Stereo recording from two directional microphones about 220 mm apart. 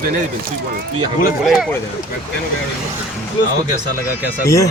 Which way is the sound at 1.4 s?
Centre (ahead or behind).